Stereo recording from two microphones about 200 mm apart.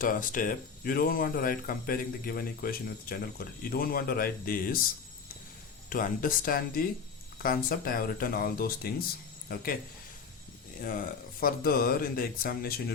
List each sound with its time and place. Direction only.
0.0 s speech: 40° left (ahead or behind)
5.9 s speech: 45° left (ahead or behind)
10.8 s speech: 45° left (ahead or behind)